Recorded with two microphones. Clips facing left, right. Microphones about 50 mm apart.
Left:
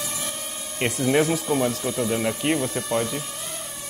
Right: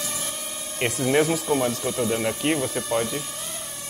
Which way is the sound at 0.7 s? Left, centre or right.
Centre.